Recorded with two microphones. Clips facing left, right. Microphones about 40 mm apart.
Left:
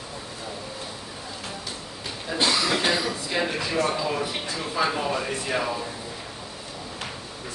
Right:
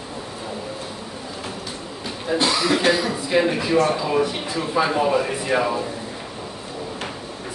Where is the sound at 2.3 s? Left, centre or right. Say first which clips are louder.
Right 4 dB; centre.